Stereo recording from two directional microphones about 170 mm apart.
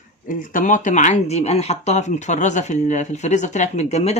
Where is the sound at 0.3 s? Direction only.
50° left (ahead or behind).